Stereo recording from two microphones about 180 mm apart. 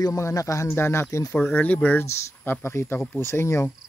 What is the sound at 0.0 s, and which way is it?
Speech, 20° left (ahead or behind).